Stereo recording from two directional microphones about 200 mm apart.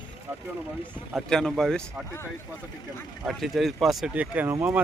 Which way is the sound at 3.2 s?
Centre (ahead or behind).